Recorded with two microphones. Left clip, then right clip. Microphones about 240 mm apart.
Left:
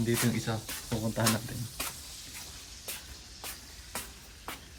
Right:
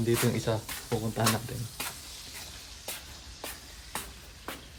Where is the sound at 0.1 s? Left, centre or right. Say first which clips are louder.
Right 5 dB; centre.